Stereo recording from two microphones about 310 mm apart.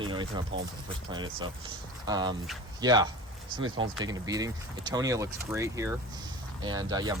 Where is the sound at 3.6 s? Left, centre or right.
Right.